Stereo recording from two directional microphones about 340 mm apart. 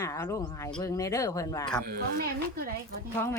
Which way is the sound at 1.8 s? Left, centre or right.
Right.